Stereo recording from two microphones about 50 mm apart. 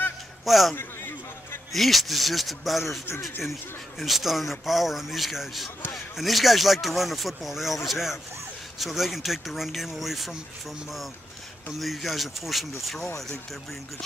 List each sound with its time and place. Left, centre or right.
0.5 s speech: centre
0.7 s a sound: left
1.7 s speech: centre
4.0 s speech: centre
11.8 s speech: centre